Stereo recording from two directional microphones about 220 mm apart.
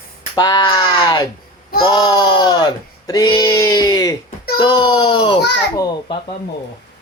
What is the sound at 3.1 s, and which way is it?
Child singing, 20° left (ahead or behind).